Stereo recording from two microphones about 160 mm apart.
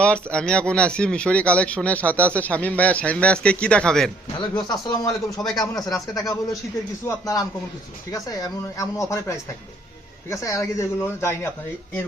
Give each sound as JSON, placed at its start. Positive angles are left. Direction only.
{"t": 0.0, "sound": "speech", "side_deg": 5}
{"t": 4.4, "sound": "speech", "side_deg": 25}
{"t": 8.1, "sound": "speech", "side_deg": 20}